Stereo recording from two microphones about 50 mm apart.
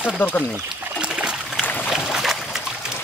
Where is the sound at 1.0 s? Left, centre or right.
Right.